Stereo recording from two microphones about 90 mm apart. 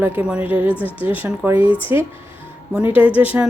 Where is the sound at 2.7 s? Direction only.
15° right (ahead or behind).